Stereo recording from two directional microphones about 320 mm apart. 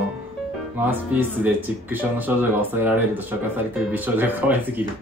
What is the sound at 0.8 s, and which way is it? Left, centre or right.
Speech, centre.